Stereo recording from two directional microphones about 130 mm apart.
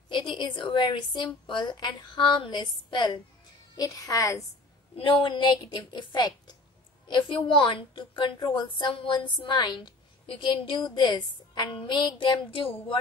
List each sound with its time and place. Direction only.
0.1 s a woman's voice: 35° left (ahead or behind)
4.9 s a woman's voice: 40° left (ahead or behind)